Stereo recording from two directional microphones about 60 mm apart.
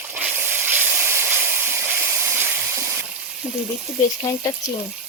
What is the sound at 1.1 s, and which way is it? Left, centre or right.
Steam, right.